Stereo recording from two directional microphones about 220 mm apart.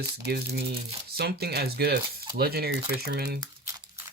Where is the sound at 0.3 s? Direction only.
45° right (ahead or behind).